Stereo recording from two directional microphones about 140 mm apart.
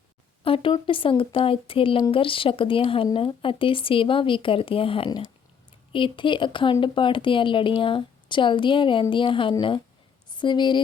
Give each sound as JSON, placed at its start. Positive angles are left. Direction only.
{"t": 0.4, "sound": "speech", "side_deg": 40}